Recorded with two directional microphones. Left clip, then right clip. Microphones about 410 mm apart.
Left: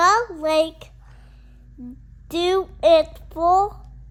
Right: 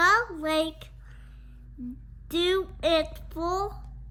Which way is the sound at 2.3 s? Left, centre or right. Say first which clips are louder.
Left 5 dB; centre.